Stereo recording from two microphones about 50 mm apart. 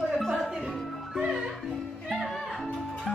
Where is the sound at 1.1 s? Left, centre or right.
Centre.